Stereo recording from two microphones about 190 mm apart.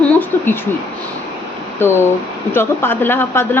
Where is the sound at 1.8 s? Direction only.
10° left (ahead or behind).